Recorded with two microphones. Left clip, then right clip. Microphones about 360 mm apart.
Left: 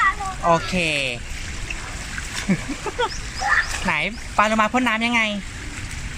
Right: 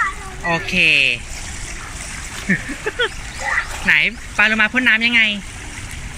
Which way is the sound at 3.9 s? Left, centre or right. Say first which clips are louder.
Right 8 dB; centre.